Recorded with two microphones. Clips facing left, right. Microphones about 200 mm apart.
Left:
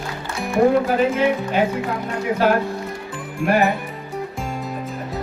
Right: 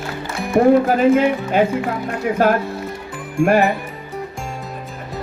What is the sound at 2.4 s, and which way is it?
Speech, 45° right (ahead or behind).